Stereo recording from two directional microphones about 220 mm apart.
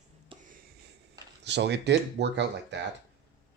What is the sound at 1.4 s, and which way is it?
Speech, 50° right (ahead or behind).